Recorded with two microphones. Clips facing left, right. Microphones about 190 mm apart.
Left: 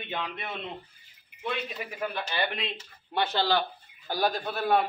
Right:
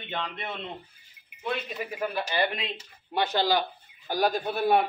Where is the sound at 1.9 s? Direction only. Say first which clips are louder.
Right 3 dB; 10° right (ahead or behind).